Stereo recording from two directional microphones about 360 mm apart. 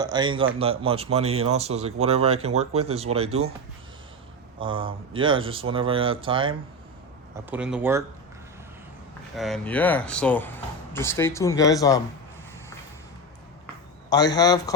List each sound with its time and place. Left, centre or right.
0.0 s speech: centre
4.6 s speech: centre
7.5 s speech: centre
9.3 s speech: centre
14.1 s a man's voice: centre